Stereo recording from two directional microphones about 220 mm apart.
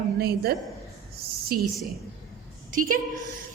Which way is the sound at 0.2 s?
45° right (ahead or behind).